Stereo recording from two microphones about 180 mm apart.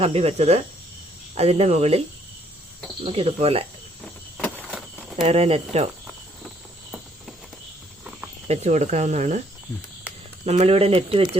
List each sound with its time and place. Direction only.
0.0 s speech: 35° right (ahead or behind)
3.0 s speech: 35° right (ahead or behind)
4.4 s a sound: 10° left (ahead or behind)
4.7 s a sound: 5° right (ahead or behind)
5.2 s speech: 35° right (ahead or behind)
8.4 s speech: 40° right (ahead or behind)
10.4 s speech: 35° right (ahead or behind)